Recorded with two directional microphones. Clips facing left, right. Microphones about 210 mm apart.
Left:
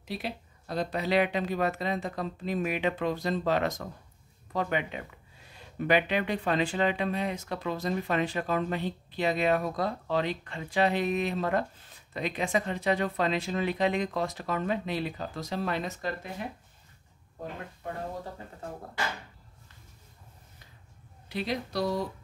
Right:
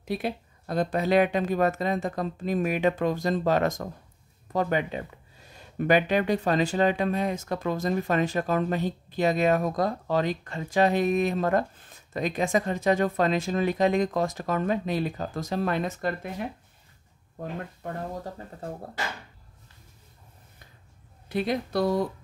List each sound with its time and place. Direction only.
0.0 s speech: 50° right (ahead or behind)
21.3 s speech: 50° right (ahead or behind)